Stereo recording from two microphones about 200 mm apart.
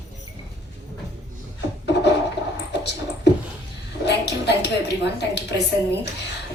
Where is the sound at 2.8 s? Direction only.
60° left (ahead or behind).